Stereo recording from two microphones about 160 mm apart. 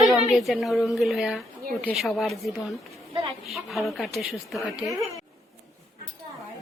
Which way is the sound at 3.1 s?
35° right (ahead or behind).